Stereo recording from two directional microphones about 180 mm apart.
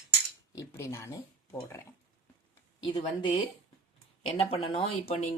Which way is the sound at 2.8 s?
25° left (ahead or behind).